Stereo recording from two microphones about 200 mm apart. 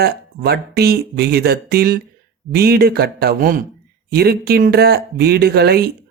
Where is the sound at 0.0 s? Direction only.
55° right (ahead or behind).